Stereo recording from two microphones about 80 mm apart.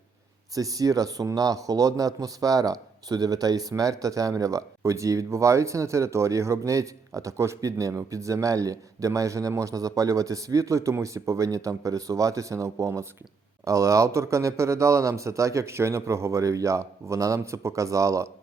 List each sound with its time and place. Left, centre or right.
0.5 s a man's voice: right